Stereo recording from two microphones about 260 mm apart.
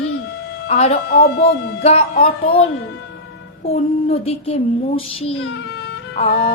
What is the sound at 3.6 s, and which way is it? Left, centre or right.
Speech, left.